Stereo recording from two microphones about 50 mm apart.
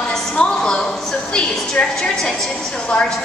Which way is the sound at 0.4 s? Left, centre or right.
Centre.